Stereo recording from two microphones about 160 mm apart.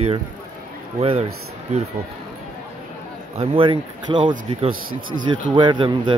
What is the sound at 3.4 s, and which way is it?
Speech, 35° right (ahead or behind).